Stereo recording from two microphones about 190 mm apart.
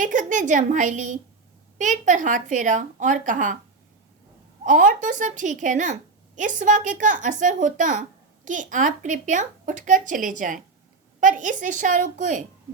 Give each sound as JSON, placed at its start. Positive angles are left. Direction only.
{"t": 0.0, "sound": "a woman's voice", "side_deg": -40}
{"t": 4.6, "sound": "a woman's voice", "side_deg": -45}